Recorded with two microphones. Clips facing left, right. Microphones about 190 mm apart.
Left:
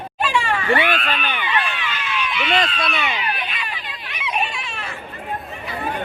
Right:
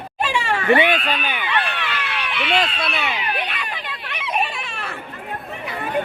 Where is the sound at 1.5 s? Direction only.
65° right (ahead or behind).